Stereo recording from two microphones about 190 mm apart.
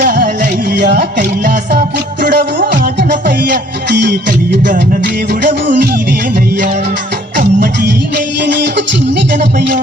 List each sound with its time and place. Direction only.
0.0 s music: 50° right (ahead or behind)
2.2 s music: 45° right (ahead or behind)
3.8 s music: 60° right (ahead or behind)
5.3 s music: 60° right (ahead or behind)
7.6 s music: 55° right (ahead or behind)